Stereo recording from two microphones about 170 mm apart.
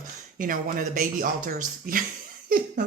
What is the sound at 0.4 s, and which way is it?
Speech, 55° right (ahead or behind).